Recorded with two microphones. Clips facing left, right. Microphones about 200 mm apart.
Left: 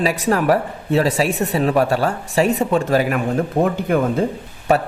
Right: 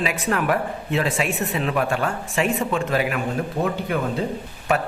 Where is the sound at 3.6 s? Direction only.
60° left (ahead or behind).